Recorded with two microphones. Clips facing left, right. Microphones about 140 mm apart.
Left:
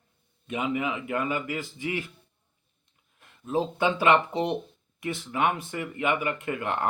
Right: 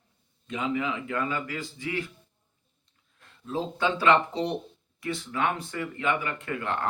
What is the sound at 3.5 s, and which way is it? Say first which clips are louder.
Speech: left 3 dB; 15° left (ahead or behind).